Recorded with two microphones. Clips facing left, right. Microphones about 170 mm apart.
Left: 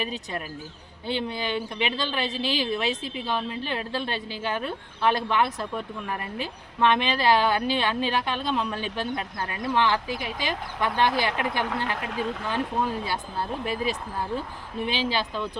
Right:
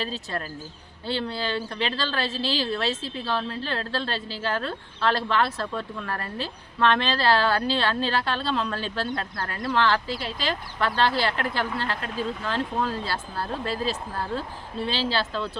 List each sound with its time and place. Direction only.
0.0 s a woman's voice: 15° left (ahead or behind)